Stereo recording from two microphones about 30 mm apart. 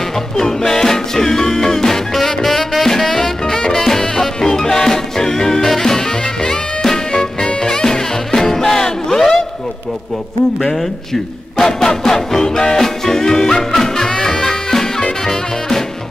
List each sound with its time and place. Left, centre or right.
0.4 s music: centre
11.5 s music: centre